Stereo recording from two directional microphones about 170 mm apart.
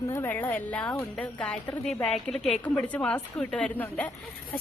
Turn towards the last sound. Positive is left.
turn(degrees=10)  # may be behind; listen again after turning